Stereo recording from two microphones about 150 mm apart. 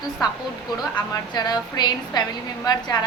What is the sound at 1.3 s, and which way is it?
A woman's voice, 30° left (ahead or behind).